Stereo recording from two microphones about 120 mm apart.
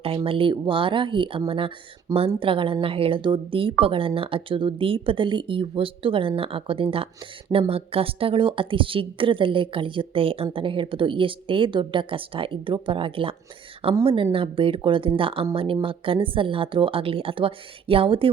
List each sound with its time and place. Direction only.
0.3 s speech: 50° right (ahead or behind)